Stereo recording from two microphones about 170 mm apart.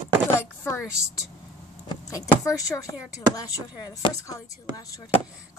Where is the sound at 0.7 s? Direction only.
15° left (ahead or behind).